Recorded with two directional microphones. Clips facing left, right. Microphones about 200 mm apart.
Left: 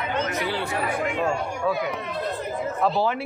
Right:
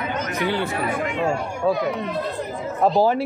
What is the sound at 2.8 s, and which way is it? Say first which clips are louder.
Speech: right 6 dB; 40° right (ahead or behind).